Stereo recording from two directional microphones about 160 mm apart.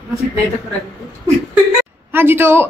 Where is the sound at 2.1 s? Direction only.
15° right (ahead or behind).